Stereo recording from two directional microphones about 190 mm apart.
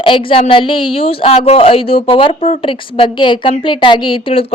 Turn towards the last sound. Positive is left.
turn(degrees=30)  # may be behind; listen again after turning